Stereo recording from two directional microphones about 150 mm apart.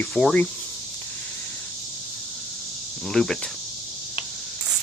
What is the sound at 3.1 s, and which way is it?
Speech, 5° left (ahead or behind).